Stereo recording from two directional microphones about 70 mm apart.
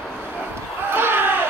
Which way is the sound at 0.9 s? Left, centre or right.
Right.